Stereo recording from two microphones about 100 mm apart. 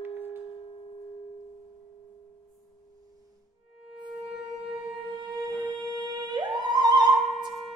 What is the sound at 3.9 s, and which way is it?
Wind instrument, 60° right (ahead or behind).